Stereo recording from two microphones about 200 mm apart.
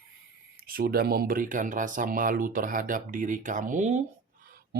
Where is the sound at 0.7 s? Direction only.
45° right (ahead or behind).